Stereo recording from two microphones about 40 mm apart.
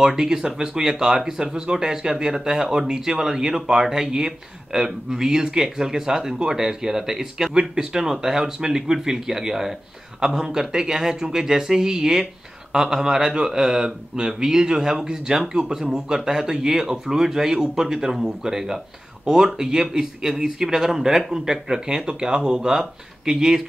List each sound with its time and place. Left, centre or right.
0.0 s speech: centre